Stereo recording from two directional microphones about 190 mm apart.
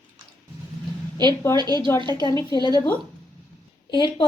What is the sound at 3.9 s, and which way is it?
Speech, 25° left (ahead or behind).